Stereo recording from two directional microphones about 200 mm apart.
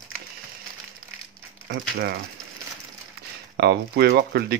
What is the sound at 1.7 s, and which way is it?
Speech, 50° right (ahead or behind).